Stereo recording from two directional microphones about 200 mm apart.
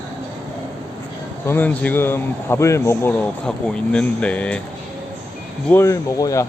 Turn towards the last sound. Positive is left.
turn(degrees=15)  # may be behind; listen again after turning